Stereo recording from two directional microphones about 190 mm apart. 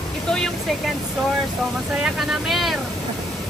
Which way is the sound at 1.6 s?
5° right (ahead or behind).